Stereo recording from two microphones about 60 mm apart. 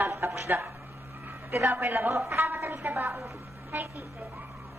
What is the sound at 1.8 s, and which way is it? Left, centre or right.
Speech, right.